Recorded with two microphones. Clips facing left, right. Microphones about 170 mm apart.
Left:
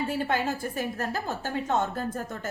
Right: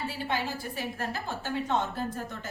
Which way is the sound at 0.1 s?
50° left (ahead or behind).